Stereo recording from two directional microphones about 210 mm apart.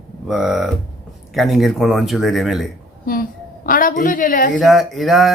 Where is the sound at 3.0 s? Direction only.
45° left (ahead or behind).